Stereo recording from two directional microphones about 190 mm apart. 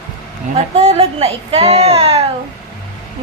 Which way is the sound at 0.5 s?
35° right (ahead or behind).